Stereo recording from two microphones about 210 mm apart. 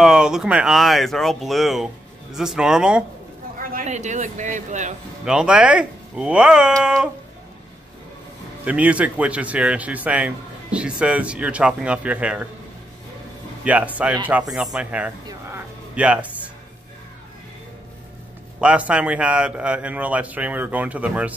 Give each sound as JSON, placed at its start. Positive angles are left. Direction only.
{"t": 0.0, "sound": "speech", "side_deg": -5}
{"t": 3.7, "sound": "speech", "side_deg": -35}
{"t": 5.2, "sound": "speech", "side_deg": -5}
{"t": 8.6, "sound": "speech", "side_deg": -5}
{"t": 13.7, "sound": "speech", "side_deg": -5}
{"t": 18.6, "sound": "speech", "side_deg": -5}